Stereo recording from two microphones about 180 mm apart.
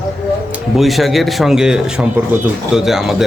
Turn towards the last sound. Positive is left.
turn(degrees=0)  # may be behind; listen again after turning